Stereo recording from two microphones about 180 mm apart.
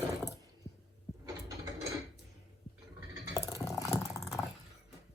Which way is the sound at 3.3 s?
15° left (ahead or behind).